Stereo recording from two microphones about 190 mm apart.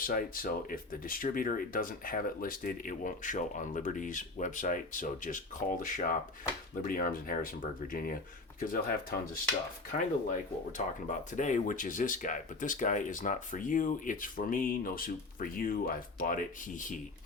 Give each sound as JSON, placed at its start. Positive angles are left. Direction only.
{"t": 0.0, "sound": "speech", "side_deg": 50}